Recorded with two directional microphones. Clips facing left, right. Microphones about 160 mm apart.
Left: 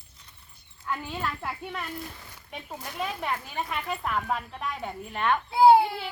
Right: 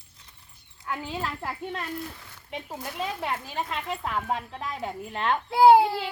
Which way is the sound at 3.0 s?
25° right (ahead or behind).